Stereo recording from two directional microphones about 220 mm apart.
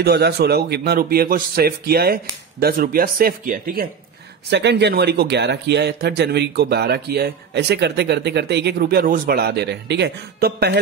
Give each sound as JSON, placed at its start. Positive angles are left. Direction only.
{"t": 0.0, "sound": "speech", "side_deg": -45}